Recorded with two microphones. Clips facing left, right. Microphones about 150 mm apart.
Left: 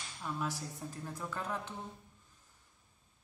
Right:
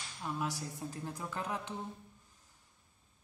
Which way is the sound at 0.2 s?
15° right (ahead or behind).